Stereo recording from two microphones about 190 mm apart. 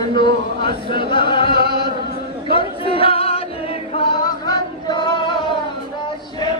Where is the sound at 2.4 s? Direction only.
30° left (ahead or behind).